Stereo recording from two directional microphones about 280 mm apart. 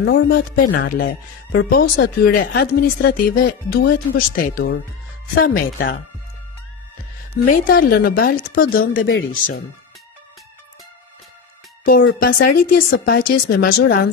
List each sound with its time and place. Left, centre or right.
0.0 s speech: left
7.3 s speech: left
11.8 s speech: left